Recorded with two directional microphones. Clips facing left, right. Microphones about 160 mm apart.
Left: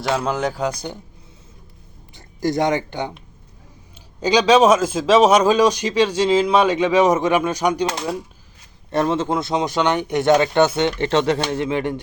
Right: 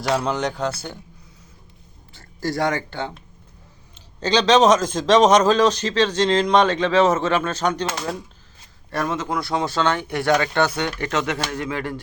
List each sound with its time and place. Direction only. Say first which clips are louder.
0.1 s a man's voice: left 1 dB; centre (ahead or behind)
0.7 s a man's voice: left 3 dB; 15° left (ahead or behind)
2.1 s a man's voice: left 4 dB; 20° left (ahead or behind)
8.9 s speech: left 5 dB; 25° left (ahead or behind)